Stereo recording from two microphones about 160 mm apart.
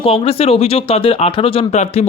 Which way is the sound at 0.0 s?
35° left (ahead or behind).